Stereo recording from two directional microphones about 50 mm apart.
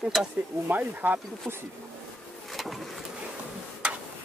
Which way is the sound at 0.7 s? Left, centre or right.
Right.